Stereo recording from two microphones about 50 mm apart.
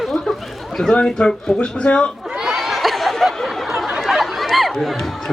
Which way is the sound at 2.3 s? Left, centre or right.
Centre.